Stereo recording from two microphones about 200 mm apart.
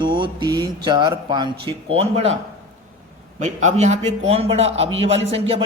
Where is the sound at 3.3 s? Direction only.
35° right (ahead or behind).